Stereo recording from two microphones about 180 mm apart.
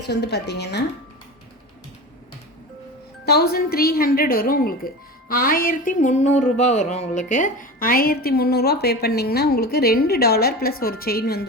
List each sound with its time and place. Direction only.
0.1 s speech: 65° left (ahead or behind)
3.2 s a woman's voice: 65° left (ahead or behind)
5.3 s a sound: 55° left (ahead or behind)
6.4 s a woman's voice: 40° left (ahead or behind); by 11.4 s 60° left (ahead or behind)